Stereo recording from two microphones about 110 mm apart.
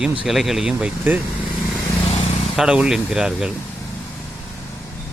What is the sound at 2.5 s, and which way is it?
Speech, 5° right (ahead or behind).